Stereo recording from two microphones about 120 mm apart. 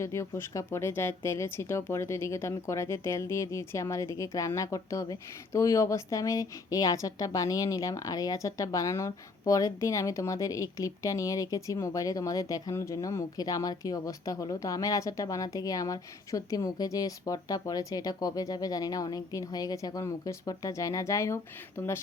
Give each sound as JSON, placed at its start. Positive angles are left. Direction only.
{"t": 0.0, "sound": "a woman's voice", "side_deg": 25}